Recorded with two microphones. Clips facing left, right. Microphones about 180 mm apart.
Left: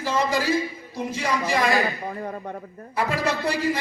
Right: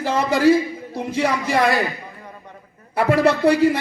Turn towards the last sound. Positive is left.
turn(degrees=-60)  # may be behind; listen again after turning